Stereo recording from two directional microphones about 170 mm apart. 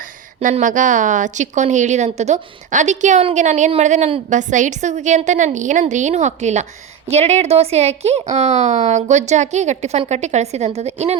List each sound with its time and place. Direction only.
0.3 s a woman's voice: 45° right (ahead or behind)